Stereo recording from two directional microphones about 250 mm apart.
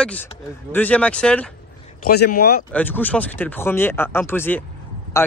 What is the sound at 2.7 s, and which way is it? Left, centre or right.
Speech, centre.